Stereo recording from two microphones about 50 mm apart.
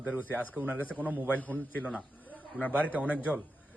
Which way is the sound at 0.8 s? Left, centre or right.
Left.